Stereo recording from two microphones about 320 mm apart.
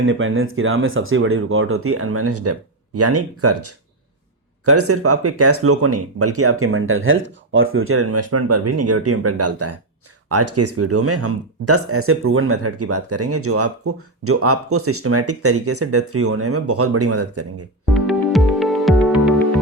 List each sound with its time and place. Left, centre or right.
0.0 s speech: right
17.9 s music: centre